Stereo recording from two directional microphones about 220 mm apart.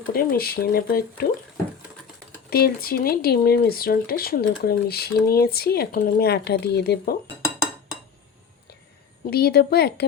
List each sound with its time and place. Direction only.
0.1 s speech: 40° left (ahead or behind)
2.5 s speech: 45° left (ahead or behind)
9.2 s speech: 45° left (ahead or behind)